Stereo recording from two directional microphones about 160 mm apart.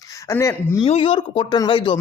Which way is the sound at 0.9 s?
35° left (ahead or behind).